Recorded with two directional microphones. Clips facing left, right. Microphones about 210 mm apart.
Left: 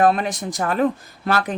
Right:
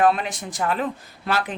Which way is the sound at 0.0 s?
40° left (ahead or behind).